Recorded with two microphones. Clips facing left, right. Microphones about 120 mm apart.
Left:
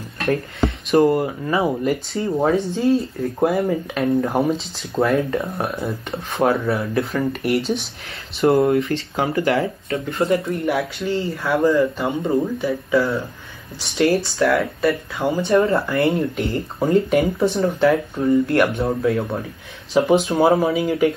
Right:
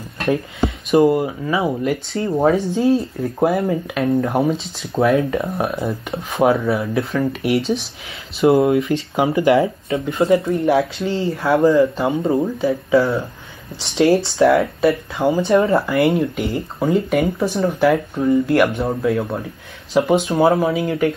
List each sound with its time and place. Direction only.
0.8 s speech: centre (ahead or behind)
9.1 s speech: 15° right (ahead or behind)
15.9 s speech: centre (ahead or behind)